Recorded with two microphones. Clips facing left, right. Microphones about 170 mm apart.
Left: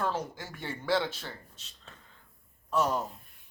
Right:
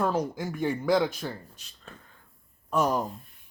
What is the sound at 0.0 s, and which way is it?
Speech, 15° right (ahead or behind).